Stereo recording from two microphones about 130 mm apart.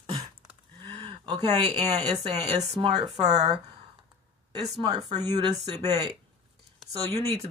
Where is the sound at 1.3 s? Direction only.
55° right (ahead or behind).